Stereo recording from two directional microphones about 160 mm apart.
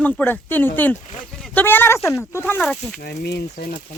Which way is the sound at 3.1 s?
90° left.